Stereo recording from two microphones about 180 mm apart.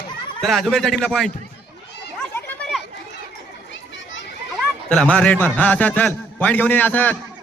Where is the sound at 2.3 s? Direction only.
5° left (ahead or behind).